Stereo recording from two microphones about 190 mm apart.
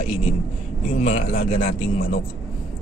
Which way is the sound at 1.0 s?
35° left (ahead or behind).